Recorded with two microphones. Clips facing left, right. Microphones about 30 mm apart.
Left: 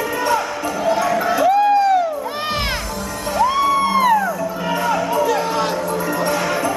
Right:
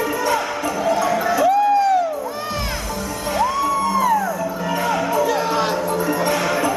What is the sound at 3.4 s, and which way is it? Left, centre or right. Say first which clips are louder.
Music: left 5 dB; left.